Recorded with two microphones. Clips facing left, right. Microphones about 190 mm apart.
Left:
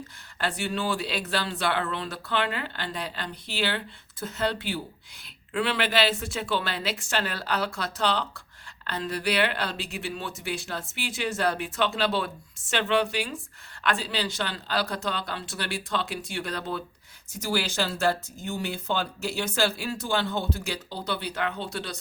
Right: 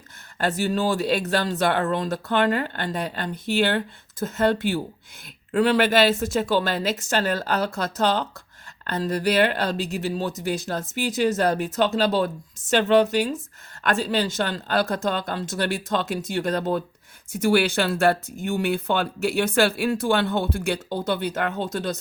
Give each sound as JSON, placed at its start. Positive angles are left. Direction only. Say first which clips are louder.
{"t": 0.3, "sound": "speech", "louder": "right 6 dB", "side_deg": -40}
{"t": 17.3, "sound": "speech", "louder": "right 8 dB", "side_deg": -60}